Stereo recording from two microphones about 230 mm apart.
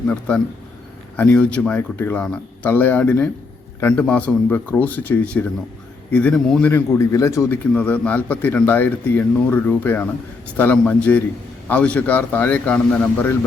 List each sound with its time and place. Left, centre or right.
0.1 s a man's voice: centre